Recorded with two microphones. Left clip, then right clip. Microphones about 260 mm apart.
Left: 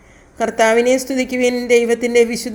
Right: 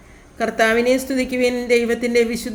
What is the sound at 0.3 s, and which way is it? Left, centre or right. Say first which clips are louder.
A woman's voice: left 3 dB; centre.